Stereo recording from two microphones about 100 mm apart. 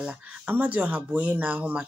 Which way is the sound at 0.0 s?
15° right (ahead or behind).